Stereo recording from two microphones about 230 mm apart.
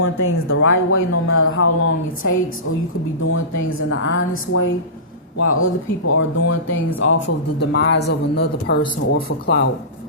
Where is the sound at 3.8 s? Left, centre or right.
Left.